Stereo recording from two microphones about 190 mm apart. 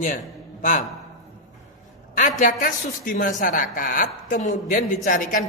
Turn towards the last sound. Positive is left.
turn(degrees=45)  # may be behind; listen again after turning